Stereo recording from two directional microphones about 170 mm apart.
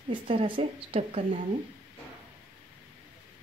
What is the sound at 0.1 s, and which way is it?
Speech, 30° right (ahead or behind).